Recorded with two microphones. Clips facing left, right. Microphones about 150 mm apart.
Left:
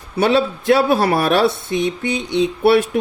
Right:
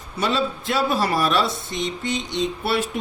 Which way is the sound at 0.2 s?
60° left (ahead or behind).